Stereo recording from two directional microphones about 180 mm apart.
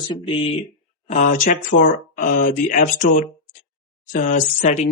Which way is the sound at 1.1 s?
45° left (ahead or behind).